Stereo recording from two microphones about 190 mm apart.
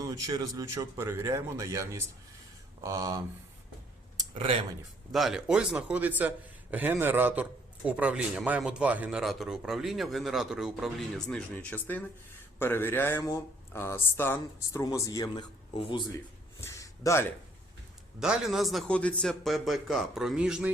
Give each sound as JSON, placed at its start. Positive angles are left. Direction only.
{"t": 0.0, "sound": "a man's voice", "side_deg": -20}
{"t": 5.1, "sound": "a man's voice", "side_deg": 0}
{"t": 16.6, "sound": "a sound", "side_deg": 15}
{"t": 18.2, "sound": "a man's voice", "side_deg": 0}